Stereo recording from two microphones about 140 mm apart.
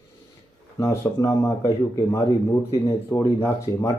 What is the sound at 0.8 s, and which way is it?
Speech, 25° left (ahead or behind).